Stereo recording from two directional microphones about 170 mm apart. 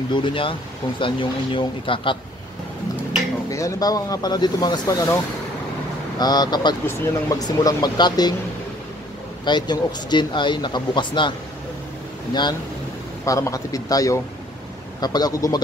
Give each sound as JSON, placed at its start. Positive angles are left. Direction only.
{"t": 0.1, "sound": "speech", "side_deg": 30}
{"t": 3.4, "sound": "speech", "side_deg": 20}
{"t": 9.4, "sound": "speech", "side_deg": 25}
{"t": 13.2, "sound": "speech", "side_deg": 20}